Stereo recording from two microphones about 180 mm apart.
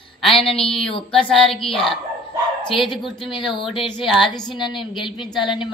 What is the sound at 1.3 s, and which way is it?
Speech, centre (ahead or behind).